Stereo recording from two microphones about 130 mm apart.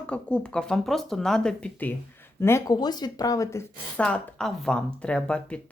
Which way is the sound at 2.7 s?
30° left (ahead or behind).